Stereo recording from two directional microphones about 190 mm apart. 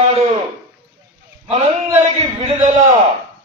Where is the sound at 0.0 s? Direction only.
35° right (ahead or behind).